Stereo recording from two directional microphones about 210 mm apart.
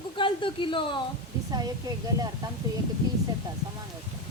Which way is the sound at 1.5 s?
20° right (ahead or behind).